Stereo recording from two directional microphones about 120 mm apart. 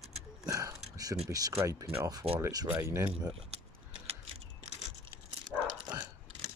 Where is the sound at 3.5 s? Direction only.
55° right (ahead or behind).